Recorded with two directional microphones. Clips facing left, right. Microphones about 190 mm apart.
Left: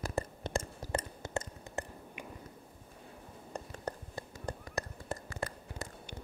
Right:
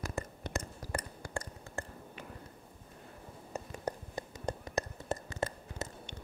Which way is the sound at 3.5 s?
15° right (ahead or behind).